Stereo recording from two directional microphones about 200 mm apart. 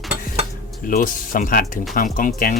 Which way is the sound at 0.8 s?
40° left (ahead or behind).